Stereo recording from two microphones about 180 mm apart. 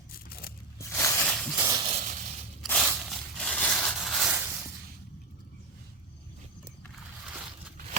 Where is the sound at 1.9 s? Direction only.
45° right (ahead or behind).